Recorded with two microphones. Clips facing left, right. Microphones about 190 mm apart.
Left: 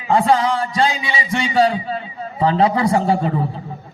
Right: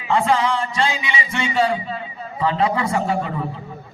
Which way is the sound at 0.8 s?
30° left (ahead or behind).